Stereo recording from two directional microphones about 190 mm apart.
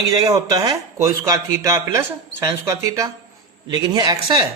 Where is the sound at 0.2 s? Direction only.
20° right (ahead or behind).